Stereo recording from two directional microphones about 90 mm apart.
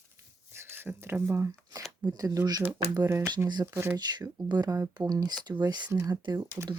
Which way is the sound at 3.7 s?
25° right (ahead or behind).